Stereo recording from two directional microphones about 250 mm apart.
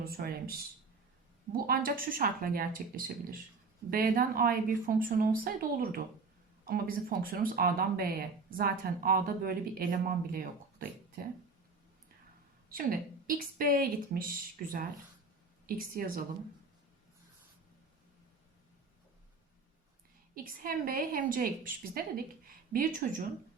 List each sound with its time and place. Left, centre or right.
0.0 s speech: right
1.5 s speech: right
12.6 s speech: right
20.3 s speech: right